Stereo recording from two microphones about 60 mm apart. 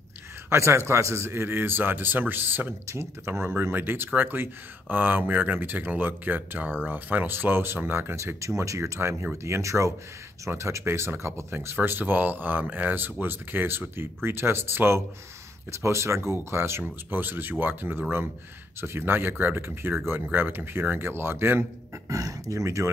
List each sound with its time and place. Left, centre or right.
0.5 s speech: right
8.2 s speech: right
16.8 s speech: right
22.1 s speech: right